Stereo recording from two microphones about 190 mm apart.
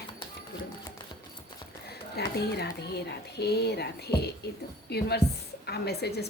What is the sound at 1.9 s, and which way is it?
Speech, 60° left (ahead or behind).